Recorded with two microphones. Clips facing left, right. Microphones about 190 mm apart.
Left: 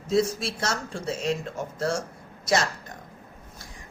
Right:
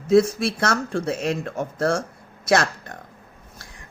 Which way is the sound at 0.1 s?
60° right (ahead or behind).